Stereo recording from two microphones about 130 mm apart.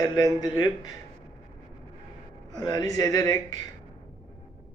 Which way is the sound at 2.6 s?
30° left (ahead or behind).